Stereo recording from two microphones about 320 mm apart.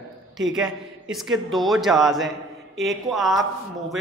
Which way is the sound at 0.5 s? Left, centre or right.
Centre.